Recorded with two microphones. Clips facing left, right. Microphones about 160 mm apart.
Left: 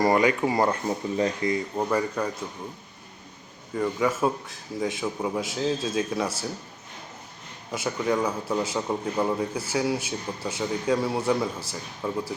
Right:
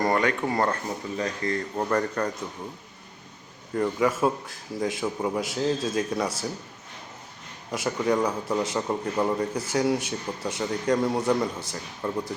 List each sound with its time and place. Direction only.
0.0 s speech: 10° left (ahead or behind)
1.5 s speech: 10° left (ahead or behind)
3.8 s a man's voice: centre (ahead or behind)
7.7 s a man's voice: centre (ahead or behind)